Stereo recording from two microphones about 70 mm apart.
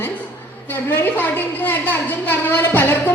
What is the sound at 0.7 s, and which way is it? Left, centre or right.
A woman's voice, left.